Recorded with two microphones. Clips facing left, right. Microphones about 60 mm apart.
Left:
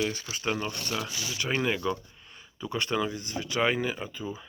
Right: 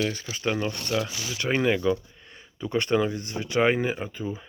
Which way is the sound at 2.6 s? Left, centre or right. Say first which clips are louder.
Right 5 dB; right.